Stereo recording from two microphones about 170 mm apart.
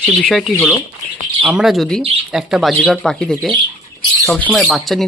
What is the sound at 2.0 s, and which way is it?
Speech, 35° right (ahead or behind).